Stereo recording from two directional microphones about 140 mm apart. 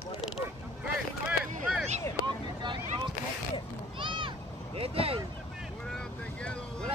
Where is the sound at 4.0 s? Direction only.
35° right (ahead or behind).